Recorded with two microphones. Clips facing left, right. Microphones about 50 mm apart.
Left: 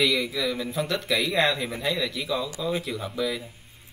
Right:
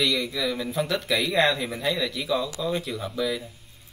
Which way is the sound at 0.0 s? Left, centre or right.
Centre.